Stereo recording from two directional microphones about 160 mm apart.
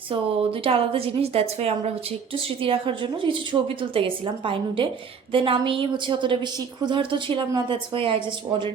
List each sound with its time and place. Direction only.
0.1 s a woman's voice: 35° right (ahead or behind)